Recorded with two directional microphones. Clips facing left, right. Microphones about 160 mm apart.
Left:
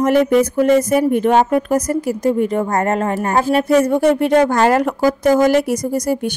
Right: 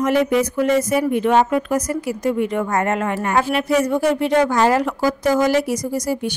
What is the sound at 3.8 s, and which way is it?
A woman's voice, 50° left (ahead or behind).